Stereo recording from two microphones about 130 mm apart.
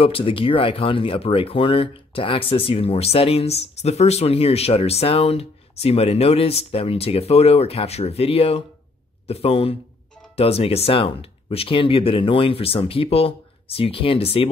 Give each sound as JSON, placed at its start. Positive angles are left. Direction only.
{"t": 0.0, "sound": "speech", "side_deg": 45}